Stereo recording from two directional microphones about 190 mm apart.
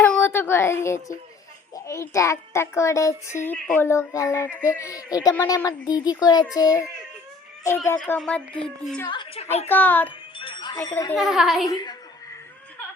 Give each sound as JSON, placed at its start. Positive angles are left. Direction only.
{"t": 0.0, "sound": "child singing", "side_deg": 10}
{"t": 1.7, "sound": "a child's voice", "side_deg": 15}
{"t": 7.9, "sound": "a woman's voice", "side_deg": 5}
{"t": 9.0, "sound": "speech", "side_deg": 30}
{"t": 9.6, "sound": "a child's voice", "side_deg": 10}
{"t": 10.3, "sound": "music", "side_deg": 25}
{"t": 11.1, "sound": "a woman's voice", "side_deg": 0}
{"t": 11.7, "sound": "speech", "side_deg": 20}